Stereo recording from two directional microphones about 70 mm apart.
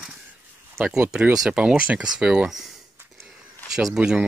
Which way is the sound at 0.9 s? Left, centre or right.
Centre.